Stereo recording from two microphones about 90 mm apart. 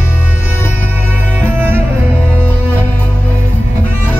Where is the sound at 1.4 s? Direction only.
25° right (ahead or behind).